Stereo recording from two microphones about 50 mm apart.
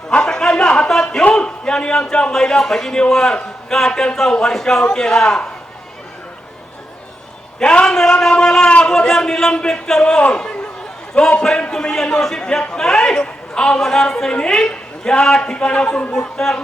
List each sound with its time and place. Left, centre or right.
0.3 s a sound: centre
1.2 s a man's voice: left
7.6 s a man's voice: left
7.9 s a man's voice: centre
10.3 s a sound: centre
11.4 s a man's voice: centre
12.2 s a man's voice: centre